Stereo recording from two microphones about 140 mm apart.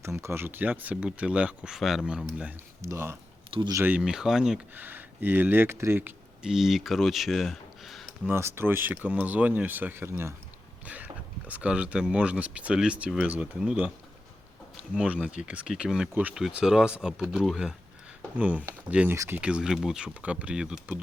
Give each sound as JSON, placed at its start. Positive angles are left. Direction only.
{"t": 0.0, "sound": "speech", "side_deg": -20}
{"t": 2.8, "sound": "speech", "side_deg": -20}
{"t": 8.3, "sound": "speech", "side_deg": -15}
{"t": 14.9, "sound": "speech", "side_deg": -10}
{"t": 19.1, "sound": "speech", "side_deg": -20}
{"t": 19.4, "sound": "speech", "side_deg": -5}